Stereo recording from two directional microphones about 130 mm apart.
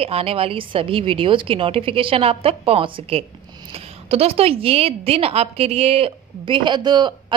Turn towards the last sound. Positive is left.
turn(degrees=-35)  # may be behind; listen again after turning